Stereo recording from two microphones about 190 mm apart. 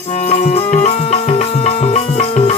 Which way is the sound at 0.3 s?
35° left (ahead or behind).